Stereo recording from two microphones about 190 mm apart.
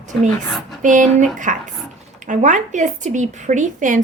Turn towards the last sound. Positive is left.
turn(degrees=-40)  # may be behind; listen again after turning